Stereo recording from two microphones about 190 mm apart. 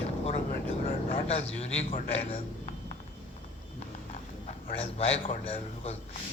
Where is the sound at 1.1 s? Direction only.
30° left (ahead or behind).